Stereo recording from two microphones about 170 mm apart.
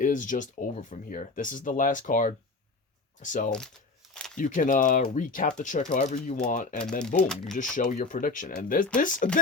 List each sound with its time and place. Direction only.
0.0 s speech: 50° left (ahead or behind)